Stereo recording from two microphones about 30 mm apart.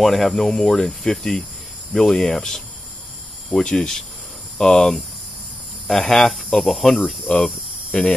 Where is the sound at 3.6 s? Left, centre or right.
Left.